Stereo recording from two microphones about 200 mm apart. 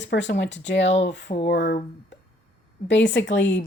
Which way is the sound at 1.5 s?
55° left (ahead or behind).